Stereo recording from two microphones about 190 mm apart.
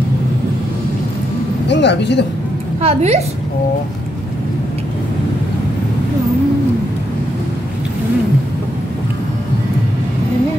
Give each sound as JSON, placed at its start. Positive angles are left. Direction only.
{"t": 1.7, "sound": "speech", "side_deg": 65}
{"t": 2.8, "sound": "a woman's voice", "side_deg": -35}